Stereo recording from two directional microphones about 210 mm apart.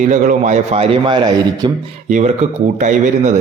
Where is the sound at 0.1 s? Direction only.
35° right (ahead or behind); by 1.7 s 20° right (ahead or behind).